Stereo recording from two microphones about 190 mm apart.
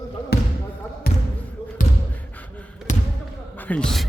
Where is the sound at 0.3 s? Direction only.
55° left (ahead or behind).